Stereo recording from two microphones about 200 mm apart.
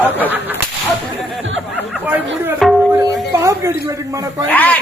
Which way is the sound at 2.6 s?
Centre (ahead or behind).